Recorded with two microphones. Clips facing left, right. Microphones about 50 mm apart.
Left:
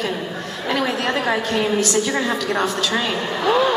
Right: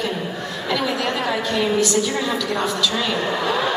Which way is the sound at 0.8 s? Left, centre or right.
Left.